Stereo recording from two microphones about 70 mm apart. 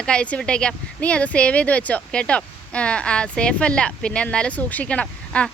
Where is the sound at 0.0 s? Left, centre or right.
Centre.